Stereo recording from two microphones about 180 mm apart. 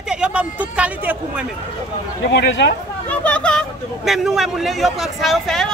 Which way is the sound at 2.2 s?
65° left (ahead or behind).